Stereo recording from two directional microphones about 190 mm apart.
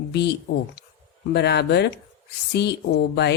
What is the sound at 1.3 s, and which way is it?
A woman's voice, 60° left (ahead or behind).